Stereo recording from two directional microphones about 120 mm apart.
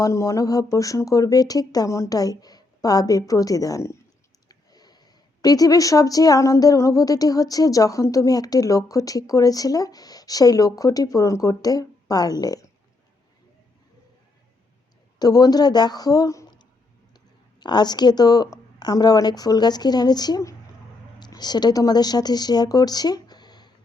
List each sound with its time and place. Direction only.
0.0 s speech: 25° left (ahead or behind)
15.2 s a woman's voice: 35° left (ahead or behind)